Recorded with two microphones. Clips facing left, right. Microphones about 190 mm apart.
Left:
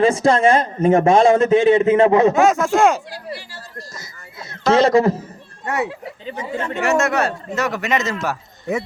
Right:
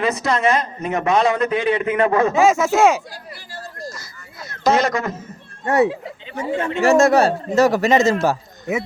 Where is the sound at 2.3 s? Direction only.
5° right (ahead or behind).